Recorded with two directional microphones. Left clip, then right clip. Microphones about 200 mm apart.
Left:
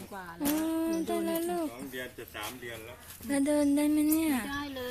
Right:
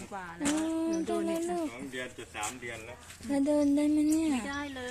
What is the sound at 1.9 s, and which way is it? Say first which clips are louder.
Speech: right 1 dB; 20° right (ahead or behind).